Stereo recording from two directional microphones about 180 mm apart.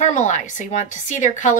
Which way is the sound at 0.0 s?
40° left (ahead or behind).